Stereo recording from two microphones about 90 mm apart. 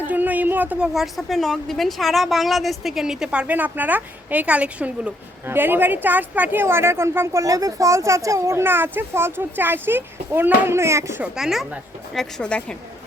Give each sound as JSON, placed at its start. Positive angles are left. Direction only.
{"t": 0.1, "sound": "a sound", "side_deg": -20}
{"t": 0.9, "sound": "a woman's voice", "side_deg": 0}
{"t": 3.4, "sound": "a woman's voice", "side_deg": -20}
{"t": 11.3, "sound": "a woman's voice", "side_deg": -5}
{"t": 12.1, "sound": "speech", "side_deg": 5}